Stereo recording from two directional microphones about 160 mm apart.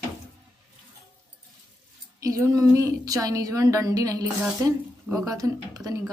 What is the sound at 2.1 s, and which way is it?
A woman's voice, 20° right (ahead or behind).